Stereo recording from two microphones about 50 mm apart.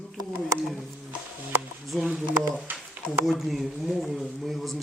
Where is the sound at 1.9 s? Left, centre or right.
Centre.